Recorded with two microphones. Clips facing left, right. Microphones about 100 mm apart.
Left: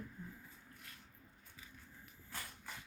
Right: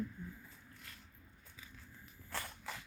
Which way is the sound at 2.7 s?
90° right.